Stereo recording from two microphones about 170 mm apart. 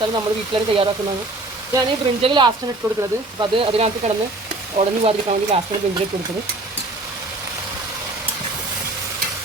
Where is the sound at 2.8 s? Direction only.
20° right (ahead or behind).